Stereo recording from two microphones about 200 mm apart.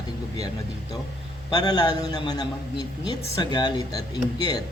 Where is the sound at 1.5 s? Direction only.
20° left (ahead or behind).